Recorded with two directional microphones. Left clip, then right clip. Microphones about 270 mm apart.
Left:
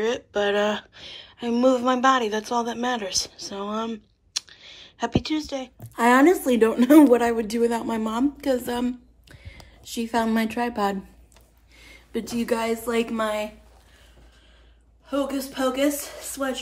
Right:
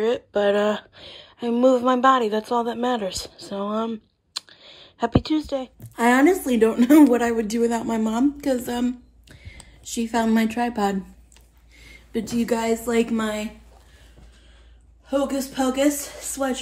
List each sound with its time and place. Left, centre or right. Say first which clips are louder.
0.0 s speech: right 3 dB; centre
5.9 s a woman's voice: even; centre
15.0 s speech: right 3 dB; centre